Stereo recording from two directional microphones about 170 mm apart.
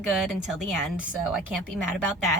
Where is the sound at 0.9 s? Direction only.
5° right (ahead or behind).